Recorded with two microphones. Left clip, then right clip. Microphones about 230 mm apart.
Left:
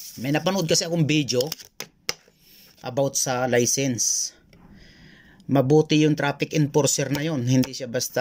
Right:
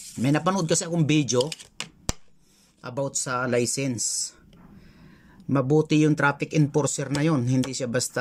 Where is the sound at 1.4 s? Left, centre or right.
Left.